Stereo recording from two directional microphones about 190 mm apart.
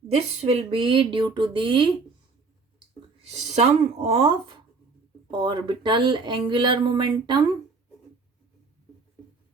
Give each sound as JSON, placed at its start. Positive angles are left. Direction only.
{"t": 0.1, "sound": "speech", "side_deg": -30}
{"t": 3.5, "sound": "speech", "side_deg": -35}